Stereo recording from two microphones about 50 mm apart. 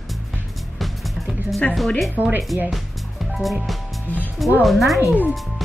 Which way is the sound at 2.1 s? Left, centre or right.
Right.